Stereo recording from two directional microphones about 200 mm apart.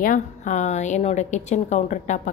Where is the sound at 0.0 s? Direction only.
40° left (ahead or behind).